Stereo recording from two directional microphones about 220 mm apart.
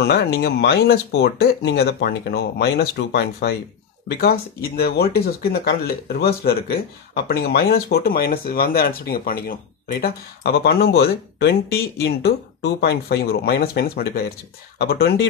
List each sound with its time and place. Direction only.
0.0 s speech: 50° left (ahead or behind)